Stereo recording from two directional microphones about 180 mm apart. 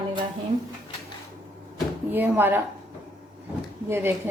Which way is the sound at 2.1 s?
10° right (ahead or behind).